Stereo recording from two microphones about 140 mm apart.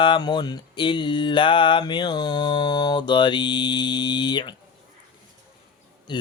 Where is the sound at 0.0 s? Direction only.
35° left (ahead or behind).